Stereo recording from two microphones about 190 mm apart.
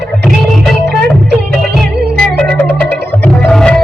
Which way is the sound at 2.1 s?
5° left (ahead or behind).